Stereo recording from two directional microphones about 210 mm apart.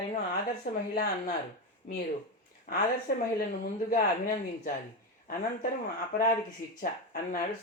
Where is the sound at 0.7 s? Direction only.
45° left (ahead or behind).